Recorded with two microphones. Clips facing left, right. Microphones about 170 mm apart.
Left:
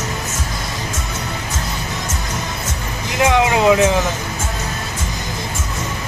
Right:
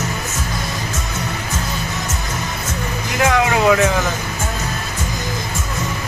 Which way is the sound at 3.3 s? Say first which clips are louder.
Left 1 dB; 20° left (ahead or behind).